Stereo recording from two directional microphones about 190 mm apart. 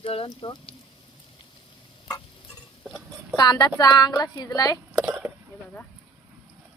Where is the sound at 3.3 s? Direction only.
20° left (ahead or behind).